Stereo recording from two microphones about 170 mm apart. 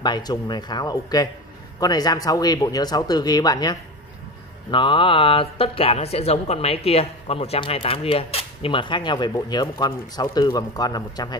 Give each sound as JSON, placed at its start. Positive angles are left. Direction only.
{"t": 0.0, "sound": "speech", "side_deg": 25}